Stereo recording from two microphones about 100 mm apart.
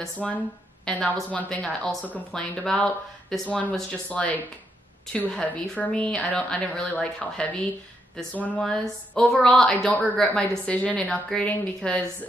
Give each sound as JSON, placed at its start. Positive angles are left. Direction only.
{"t": 0.0, "sound": "a woman's voice", "side_deg": 10}
{"t": 9.8, "sound": "a woman's voice", "side_deg": 15}